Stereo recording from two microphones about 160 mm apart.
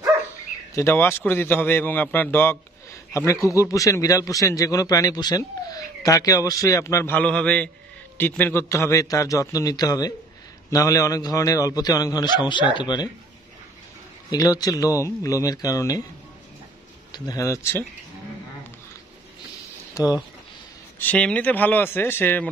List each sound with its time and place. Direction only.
0.7 s a man's voice: 15° left (ahead or behind)
14.3 s a man's voice: 25° left (ahead or behind)
17.1 s a man's voice: 20° left (ahead or behind)
19.9 s speech: 20° left (ahead or behind)
21.0 s a man's voice: 5° left (ahead or behind)